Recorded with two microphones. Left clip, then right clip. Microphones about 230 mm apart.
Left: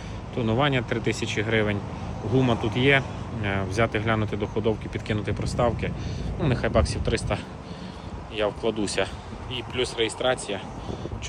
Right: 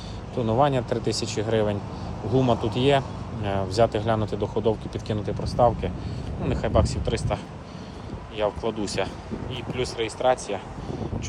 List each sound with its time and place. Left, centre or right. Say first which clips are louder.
0.3 s speech: right 2 dB; centre
8.4 s speech: even; centre